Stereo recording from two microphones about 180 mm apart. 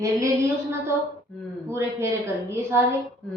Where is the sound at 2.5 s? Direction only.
15° right (ahead or behind).